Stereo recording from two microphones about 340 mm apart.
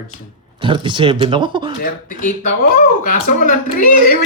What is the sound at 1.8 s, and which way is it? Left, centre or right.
Speech, left.